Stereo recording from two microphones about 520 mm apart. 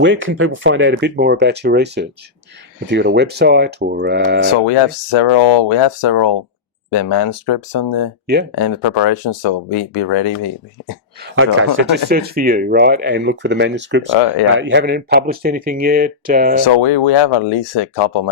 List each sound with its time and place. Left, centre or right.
0.0 s speech: right
4.4 s speech: left
11.8 s speech: centre
16.6 s speech: left